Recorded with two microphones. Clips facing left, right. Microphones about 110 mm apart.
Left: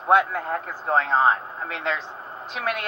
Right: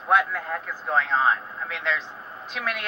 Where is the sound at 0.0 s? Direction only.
45° left (ahead or behind).